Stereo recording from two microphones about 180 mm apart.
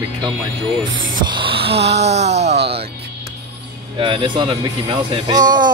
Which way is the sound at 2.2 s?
35° right (ahead or behind).